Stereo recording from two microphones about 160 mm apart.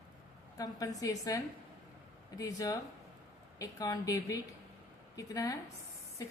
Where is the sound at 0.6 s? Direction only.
20° left (ahead or behind).